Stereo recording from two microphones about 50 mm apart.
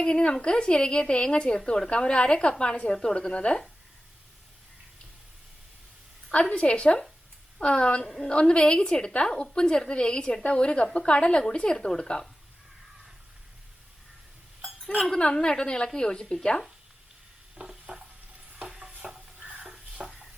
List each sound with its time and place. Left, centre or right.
0.0 s a woman's voice: centre
6.3 s a woman's voice: left
8.0 s a woman's voice: centre
8.3 s a woman's voice: centre
14.6 s chink: left
15.0 s a woman's voice: centre
17.5 s stir: right
19.0 s stir: centre